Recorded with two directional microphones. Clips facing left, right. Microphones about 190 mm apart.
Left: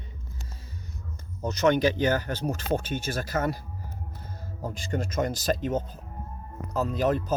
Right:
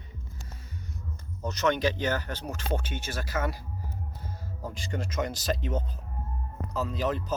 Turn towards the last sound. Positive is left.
turn(degrees=45)  # may be behind; listen again after turning